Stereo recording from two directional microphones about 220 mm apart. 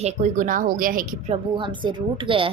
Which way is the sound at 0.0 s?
35° right (ahead or behind).